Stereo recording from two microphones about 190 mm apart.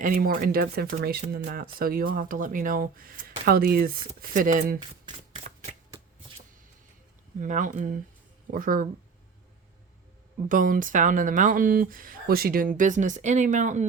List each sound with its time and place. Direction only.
0.0 s speech: 50° right (ahead or behind)
4.8 s speech: 25° right (ahead or behind)
7.3 s speech: 40° right (ahead or behind)
10.5 s speech: 45° right (ahead or behind)